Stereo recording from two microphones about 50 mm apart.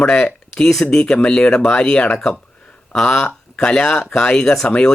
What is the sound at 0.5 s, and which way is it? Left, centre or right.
Speech, centre.